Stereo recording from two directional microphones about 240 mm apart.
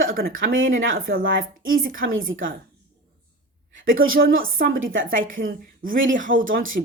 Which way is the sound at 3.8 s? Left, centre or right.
Right.